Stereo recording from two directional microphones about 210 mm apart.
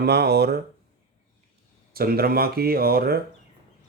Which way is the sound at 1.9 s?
45° right (ahead or behind).